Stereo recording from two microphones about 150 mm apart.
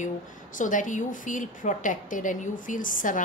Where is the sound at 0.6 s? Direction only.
60° left (ahead or behind).